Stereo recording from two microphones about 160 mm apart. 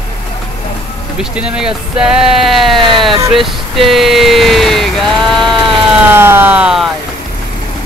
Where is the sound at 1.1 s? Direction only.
5° right (ahead or behind).